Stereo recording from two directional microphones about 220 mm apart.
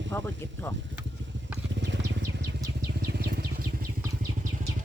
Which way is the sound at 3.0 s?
50° right (ahead or behind).